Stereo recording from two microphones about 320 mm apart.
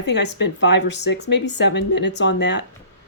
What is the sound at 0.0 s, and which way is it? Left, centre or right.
Speech, left.